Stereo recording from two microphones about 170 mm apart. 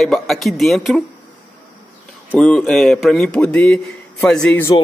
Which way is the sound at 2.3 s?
5° left (ahead or behind).